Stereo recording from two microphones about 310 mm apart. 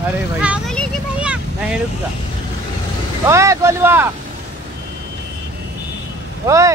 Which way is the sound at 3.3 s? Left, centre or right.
Centre.